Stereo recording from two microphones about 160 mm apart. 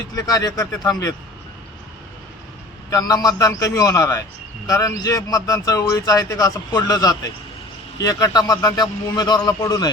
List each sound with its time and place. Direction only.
0.2 s a man's voice: 25° left (ahead or behind)
2.9 s a man's voice: 25° left (ahead or behind)